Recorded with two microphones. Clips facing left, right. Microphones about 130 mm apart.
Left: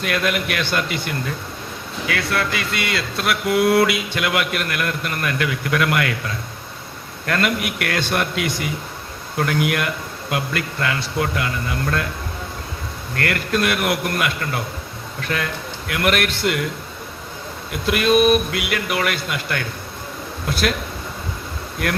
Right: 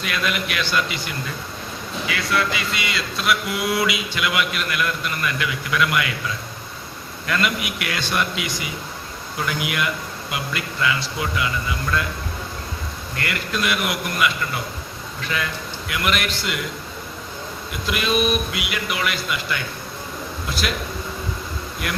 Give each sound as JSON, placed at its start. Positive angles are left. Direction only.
{"t": 0.0, "sound": "a man's voice", "side_deg": 55}
{"t": 9.6, "sound": "speech", "side_deg": 55}
{"t": 13.1, "sound": "speech", "side_deg": 55}
{"t": 17.7, "sound": "speech", "side_deg": 55}